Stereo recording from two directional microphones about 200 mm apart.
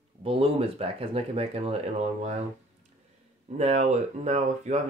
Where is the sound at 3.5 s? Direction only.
35° right (ahead or behind).